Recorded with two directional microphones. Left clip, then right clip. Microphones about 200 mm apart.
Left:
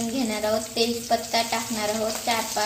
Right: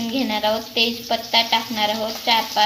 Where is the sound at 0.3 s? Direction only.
10° right (ahead or behind).